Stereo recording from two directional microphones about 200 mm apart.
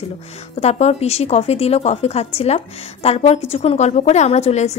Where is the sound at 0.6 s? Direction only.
35° left (ahead or behind).